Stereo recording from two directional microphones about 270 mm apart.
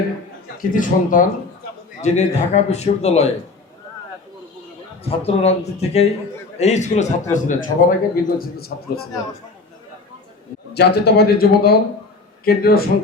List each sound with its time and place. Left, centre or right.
0.7 s a man's voice: left
5.0 s a man's voice: left
10.8 s a man's voice: left